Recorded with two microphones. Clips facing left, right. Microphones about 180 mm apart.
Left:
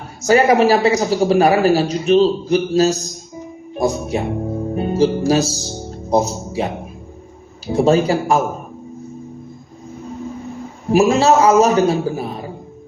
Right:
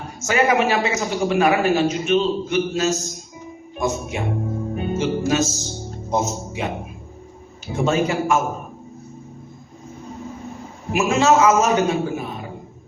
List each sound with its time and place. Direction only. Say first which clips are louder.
0.2 s a man's voice: left 6 dB; 35° left (ahead or behind)
7.7 s a man's voice: left 6 dB; 35° left (ahead or behind)
10.9 s a man's voice: left 4 dB; 35° left (ahead or behind)